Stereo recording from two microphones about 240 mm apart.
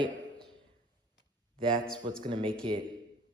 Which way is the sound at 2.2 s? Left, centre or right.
Centre.